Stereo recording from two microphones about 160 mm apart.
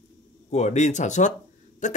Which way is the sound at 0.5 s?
45° left (ahead or behind).